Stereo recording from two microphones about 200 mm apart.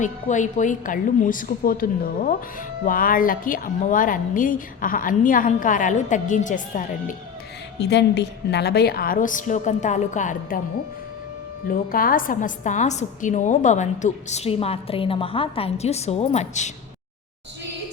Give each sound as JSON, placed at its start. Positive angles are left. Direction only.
{"t": 0.0, "sound": "a woman's voice", "side_deg": 40}
{"t": 7.8, "sound": "a woman's voice", "side_deg": 60}
{"t": 11.7, "sound": "a woman's voice", "side_deg": 45}